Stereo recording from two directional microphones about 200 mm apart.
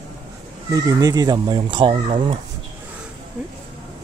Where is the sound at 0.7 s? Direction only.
20° right (ahead or behind).